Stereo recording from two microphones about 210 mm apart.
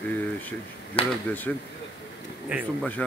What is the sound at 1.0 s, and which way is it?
Speech, 25° left (ahead or behind).